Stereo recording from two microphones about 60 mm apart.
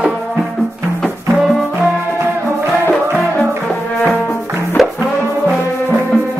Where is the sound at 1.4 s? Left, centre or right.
Centre.